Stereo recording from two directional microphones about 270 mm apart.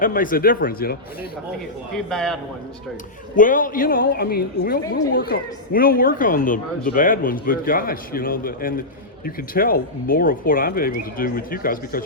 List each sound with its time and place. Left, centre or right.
0.0 s a woman's voice: left
2.0 s a man's voice: centre
3.3 s a woman's voice: left